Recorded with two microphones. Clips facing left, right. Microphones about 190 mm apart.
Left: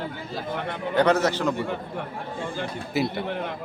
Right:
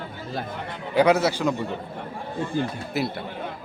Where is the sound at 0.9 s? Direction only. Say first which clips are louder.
Right 2 dB; 10° right (ahead or behind).